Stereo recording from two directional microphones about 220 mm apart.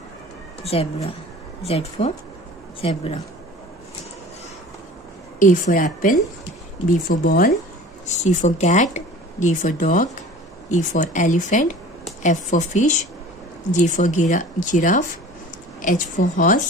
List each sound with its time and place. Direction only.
0.7 s speech: 25° left (ahead or behind)
5.4 s speech: 35° left (ahead or behind)